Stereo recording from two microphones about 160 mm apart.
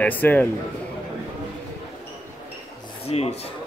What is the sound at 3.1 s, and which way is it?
Speech, 40° left (ahead or behind).